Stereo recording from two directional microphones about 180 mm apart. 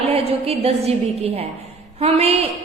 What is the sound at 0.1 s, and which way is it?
A woman's voice, 35° right (ahead or behind).